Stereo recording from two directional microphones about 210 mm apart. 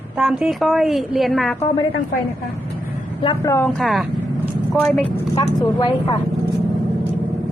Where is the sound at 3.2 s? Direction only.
15° left (ahead or behind).